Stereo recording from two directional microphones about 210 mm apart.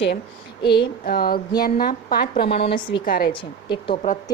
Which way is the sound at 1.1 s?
45° left (ahead or behind).